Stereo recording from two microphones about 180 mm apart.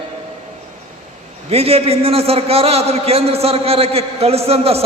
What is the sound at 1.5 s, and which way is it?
A man's voice, 35° right (ahead or behind).